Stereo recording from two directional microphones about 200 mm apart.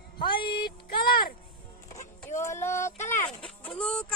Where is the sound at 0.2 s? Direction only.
25° left (ahead or behind).